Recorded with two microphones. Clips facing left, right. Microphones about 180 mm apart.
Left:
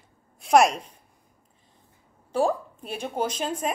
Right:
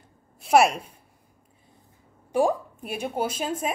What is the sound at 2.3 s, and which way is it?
A woman's voice, 10° right (ahead or behind).